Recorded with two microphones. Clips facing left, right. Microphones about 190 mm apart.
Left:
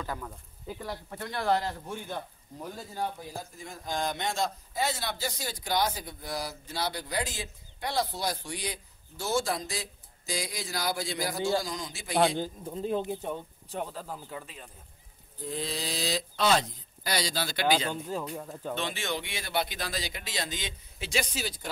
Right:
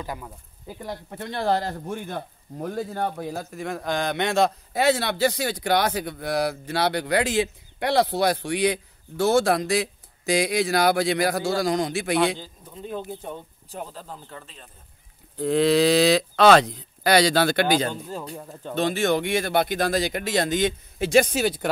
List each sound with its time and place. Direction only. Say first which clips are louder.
0.0 s speech: right 3 dB; 15° right (ahead or behind); by 12.4 s 70° right (ahead or behind)
12.9 s speech: left 1 dB; 20° left (ahead or behind)
13.7 s speech: even; centre (ahead or behind)
15.3 s speech: right 16 dB; 75° right (ahead or behind)
17.6 s speech: right 5 dB; 45° right (ahead or behind)
18.3 s speech: right 1 dB; 5° right (ahead or behind)
18.8 s speech: right 14 dB; 45° right (ahead or behind)